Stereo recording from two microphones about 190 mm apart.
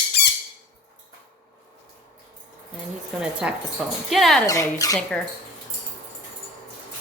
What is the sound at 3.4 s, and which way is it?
Speech, 5° right (ahead or behind).